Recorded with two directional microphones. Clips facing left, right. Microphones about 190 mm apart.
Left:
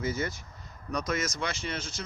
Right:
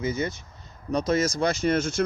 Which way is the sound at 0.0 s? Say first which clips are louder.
Right 4 dB; 20° right (ahead or behind).